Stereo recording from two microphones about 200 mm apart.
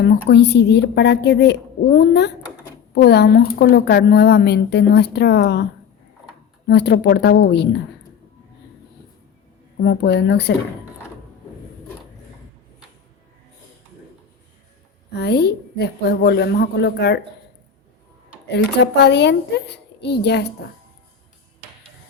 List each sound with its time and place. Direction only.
0.0 s speech: 55° left (ahead or behind)
6.7 s speech: 55° left (ahead or behind)
9.8 s speech: 60° left (ahead or behind)
15.1 s speech: 55° left (ahead or behind)
18.4 s speech: 55° left (ahead or behind)